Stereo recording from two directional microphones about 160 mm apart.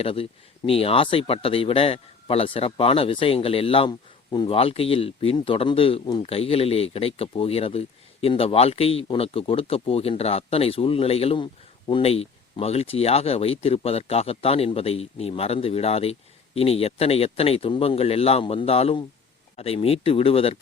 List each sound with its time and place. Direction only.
0.0 s speech: 35° left (ahead or behind)